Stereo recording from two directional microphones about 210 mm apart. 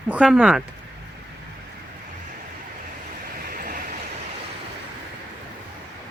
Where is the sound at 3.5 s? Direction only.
40° right (ahead or behind).